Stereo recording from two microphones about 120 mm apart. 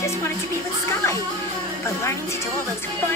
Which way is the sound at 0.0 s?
25° left (ahead or behind).